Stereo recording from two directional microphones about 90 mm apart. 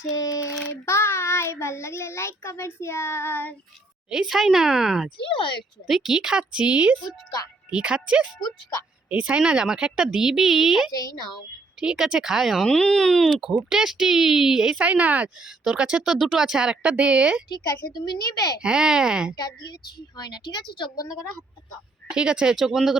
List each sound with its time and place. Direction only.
0.1 s child singing: 40° left (ahead or behind)
0.9 s a child's voice: 30° left (ahead or behind)
4.1 s speech: 5° right (ahead or behind)
5.1 s speech: 70° left (ahead or behind)
5.8 s speech: 5° right (ahead or behind)
8.3 s a woman's voice: 50° left (ahead or behind)
9.0 s speech: 15° right (ahead or behind); by 13.5 s 5° left (ahead or behind)
13.5 s speech: 10° right (ahead or behind)
17.5 s a woman's voice: 40° left (ahead or behind)
18.6 s speech: 10° right (ahead or behind)
19.4 s a woman's voice: 50° left (ahead or behind)
22.1 s speech: 10° right (ahead or behind)